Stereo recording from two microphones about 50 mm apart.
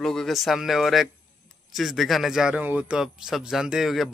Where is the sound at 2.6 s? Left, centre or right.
Right.